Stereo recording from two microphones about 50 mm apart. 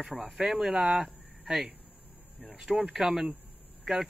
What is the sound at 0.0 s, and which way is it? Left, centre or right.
Speech, centre.